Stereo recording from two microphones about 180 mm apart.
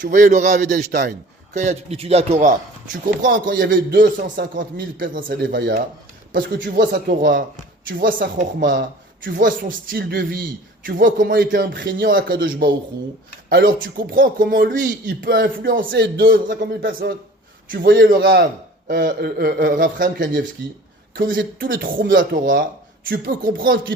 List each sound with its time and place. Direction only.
0.0 s a man's voice: 45° right (ahead or behind)
0.8 s a man's voice: 65° right (ahead or behind)
1.5 s a man's voice: 40° right (ahead or behind); by 5.7 s 65° right (ahead or behind)
6.3 s a man's voice: 50° right (ahead or behind); by 11.9 s 75° right (ahead or behind)
11.9 s a man's voice: 55° right (ahead or behind)
13.5 s a man's voice: 55° right (ahead or behind)